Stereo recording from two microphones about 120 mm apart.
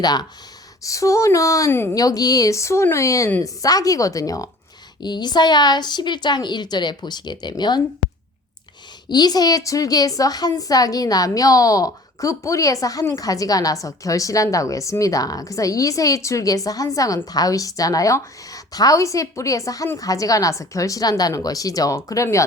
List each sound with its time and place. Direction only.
0.0 s a woman's voice: 35° left (ahead or behind); by 2.0 s 20° left (ahead or behind)
2.0 s a woman's voice: 30° left (ahead or behind)
9.0 s a woman's voice: 35° left (ahead or behind)